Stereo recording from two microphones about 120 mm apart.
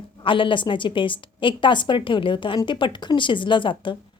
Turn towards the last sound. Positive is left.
turn(degrees=45)  # may be behind; listen again after turning